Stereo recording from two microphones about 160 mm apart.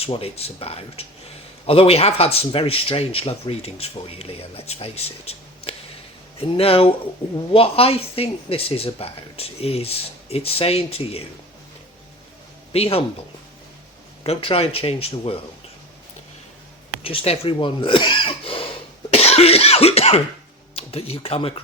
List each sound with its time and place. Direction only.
0.0 s speech: 35° left (ahead or behind)
12.7 s speech: 40° left (ahead or behind)
14.3 s speech: 35° left (ahead or behind)
17.0 s speech: 35° left (ahead or behind)
19.1 s cough: 40° left (ahead or behind)
20.7 s speech: 40° left (ahead or behind)